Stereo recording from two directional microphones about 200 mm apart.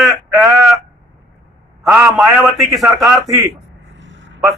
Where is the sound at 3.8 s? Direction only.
65° right (ahead or behind).